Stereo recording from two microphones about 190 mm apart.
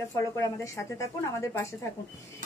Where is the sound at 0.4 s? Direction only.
15° left (ahead or behind).